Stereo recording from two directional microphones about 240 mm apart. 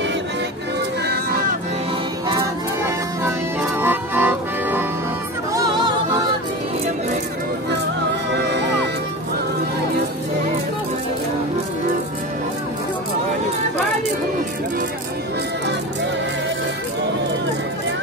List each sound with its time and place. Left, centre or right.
1.0 s a sound: right
2.2 s music: centre
3.8 s accordion: centre
5.5 s music: centre
8.4 s music: right